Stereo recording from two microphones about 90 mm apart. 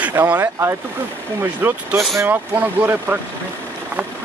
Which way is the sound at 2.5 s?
20° right (ahead or behind).